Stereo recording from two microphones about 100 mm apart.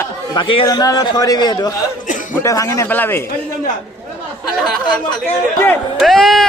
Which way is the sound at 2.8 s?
20° left (ahead or behind).